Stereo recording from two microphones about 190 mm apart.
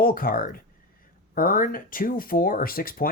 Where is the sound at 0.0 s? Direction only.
50° left (ahead or behind).